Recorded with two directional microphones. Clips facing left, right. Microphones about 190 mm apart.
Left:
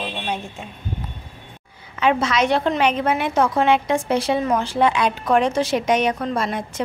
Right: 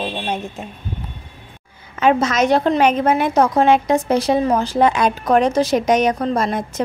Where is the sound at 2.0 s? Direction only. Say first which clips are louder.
Right 3 dB; 45° right (ahead or behind).